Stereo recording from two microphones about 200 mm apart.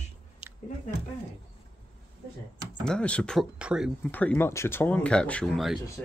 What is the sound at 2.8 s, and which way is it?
Speech, 5° left (ahead or behind).